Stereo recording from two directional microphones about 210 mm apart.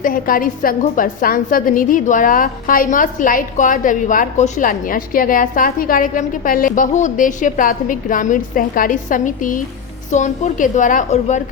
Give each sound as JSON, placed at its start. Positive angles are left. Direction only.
{"t": 0.0, "sound": "a woman's voice", "side_deg": 40}